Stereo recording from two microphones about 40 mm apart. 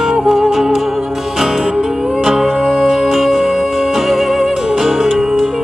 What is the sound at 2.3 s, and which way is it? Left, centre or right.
Music, centre.